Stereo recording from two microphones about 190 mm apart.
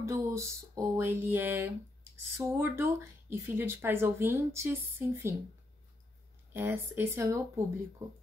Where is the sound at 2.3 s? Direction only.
15° right (ahead or behind).